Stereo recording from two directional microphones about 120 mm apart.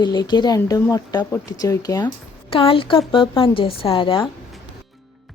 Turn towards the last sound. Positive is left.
turn(degrees=45)  # may be behind; listen again after turning